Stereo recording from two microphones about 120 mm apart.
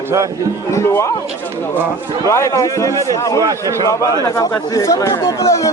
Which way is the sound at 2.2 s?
25° left (ahead or behind).